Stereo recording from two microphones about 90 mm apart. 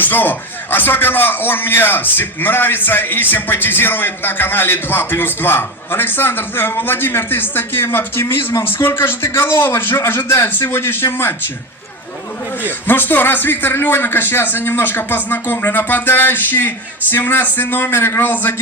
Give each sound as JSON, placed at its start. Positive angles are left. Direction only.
{"t": 0.0, "sound": "speech", "side_deg": 20}
{"t": 12.9, "sound": "speech", "side_deg": 20}